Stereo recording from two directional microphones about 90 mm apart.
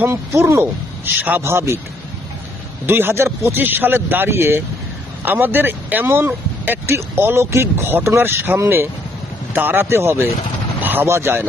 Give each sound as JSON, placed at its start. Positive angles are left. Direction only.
{"t": 0.0, "sound": "speech", "side_deg": -30}
{"t": 2.8, "sound": "speech", "side_deg": -25}